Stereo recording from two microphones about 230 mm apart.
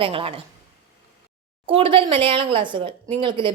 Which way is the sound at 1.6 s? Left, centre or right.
Right.